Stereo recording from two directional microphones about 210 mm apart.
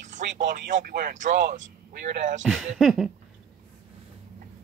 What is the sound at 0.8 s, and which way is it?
Speech, 40° right (ahead or behind).